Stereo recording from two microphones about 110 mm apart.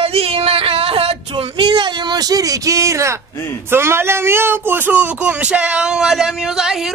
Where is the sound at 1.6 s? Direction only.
45° right (ahead or behind); by 3.1 s 25° right (ahead or behind).